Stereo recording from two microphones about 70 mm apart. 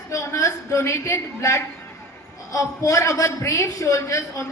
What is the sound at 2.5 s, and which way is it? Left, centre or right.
A woman's voice, left.